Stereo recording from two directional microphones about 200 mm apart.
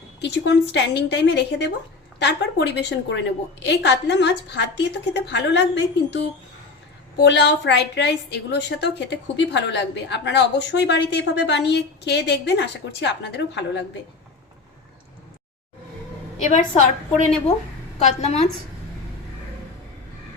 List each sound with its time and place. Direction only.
0.2 s a woman's voice: 60° left (ahead or behind)
16.4 s a woman's voice: 35° left (ahead or behind)